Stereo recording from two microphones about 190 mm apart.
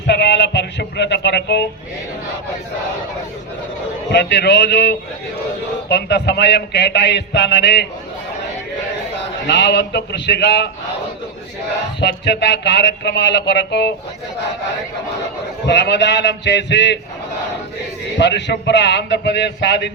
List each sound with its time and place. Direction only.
0.1 s speech: 65° left (ahead or behind)
4.1 s speech: 65° left (ahead or behind)
9.5 s speech: 60° left (ahead or behind)
11.9 s speech: 65° left (ahead or behind)
15.6 s speech: 65° left (ahead or behind)
18.2 s speech: 65° left (ahead or behind)